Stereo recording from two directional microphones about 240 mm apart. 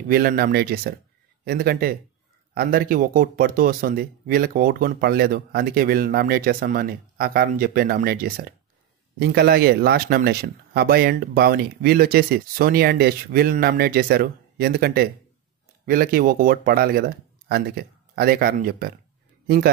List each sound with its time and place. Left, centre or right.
0.1 s speech: right